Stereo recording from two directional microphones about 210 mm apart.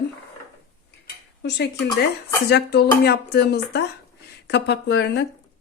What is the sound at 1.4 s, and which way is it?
Speech, 55° left (ahead or behind).